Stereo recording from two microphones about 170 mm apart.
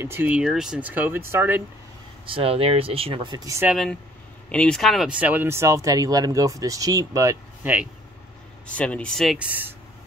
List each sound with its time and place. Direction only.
0.0 s speech: 10° right (ahead or behind)
2.2 s speech: 35° right (ahead or behind)
3.6 s speech: centre (ahead or behind)
8.6 s speech: 5° left (ahead or behind); by 9.8 s 10° right (ahead or behind)